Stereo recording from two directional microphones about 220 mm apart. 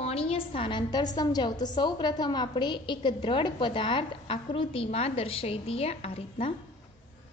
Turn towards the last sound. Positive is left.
turn(degrees=25)  # may be behind; listen again after turning